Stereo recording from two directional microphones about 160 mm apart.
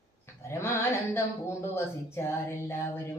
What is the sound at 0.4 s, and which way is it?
Speech, 15° left (ahead or behind).